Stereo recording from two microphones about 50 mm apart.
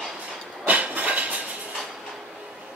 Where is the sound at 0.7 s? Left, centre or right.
Right.